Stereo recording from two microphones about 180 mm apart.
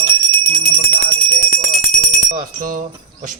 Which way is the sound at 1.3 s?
40° right (ahead or behind).